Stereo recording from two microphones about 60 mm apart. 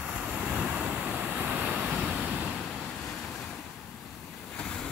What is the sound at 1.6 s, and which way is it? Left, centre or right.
Vehicle, centre.